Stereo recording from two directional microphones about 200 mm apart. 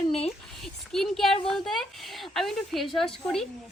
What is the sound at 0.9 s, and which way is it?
Speech, centre (ahead or behind).